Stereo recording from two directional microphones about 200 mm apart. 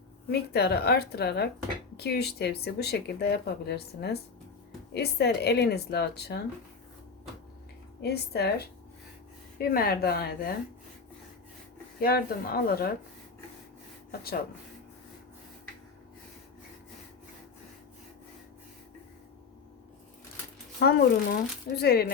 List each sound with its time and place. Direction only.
0.3 s speech: 55° left (ahead or behind)
8.0 s speech: 55° left (ahead or behind)
11.9 s speech: 50° left (ahead or behind)
20.7 s speech: 50° left (ahead or behind)